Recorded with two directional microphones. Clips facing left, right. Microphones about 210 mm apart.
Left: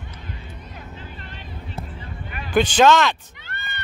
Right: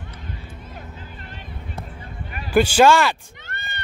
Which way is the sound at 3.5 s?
45° right (ahead or behind).